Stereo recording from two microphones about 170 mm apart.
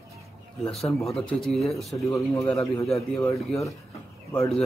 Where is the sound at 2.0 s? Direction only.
20° left (ahead or behind).